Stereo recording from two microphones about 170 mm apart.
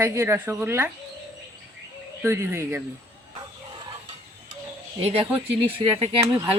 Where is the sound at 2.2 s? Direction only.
15° right (ahead or behind).